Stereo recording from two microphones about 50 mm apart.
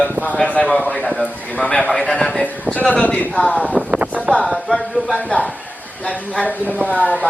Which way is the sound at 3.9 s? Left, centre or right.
Right.